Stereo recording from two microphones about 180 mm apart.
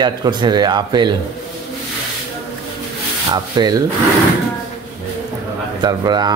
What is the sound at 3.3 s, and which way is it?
Speech, 20° right (ahead or behind).